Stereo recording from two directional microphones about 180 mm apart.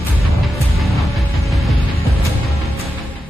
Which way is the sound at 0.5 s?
Centre (ahead or behind).